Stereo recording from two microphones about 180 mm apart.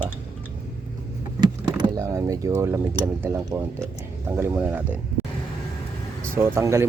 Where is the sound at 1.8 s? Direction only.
15° right (ahead or behind).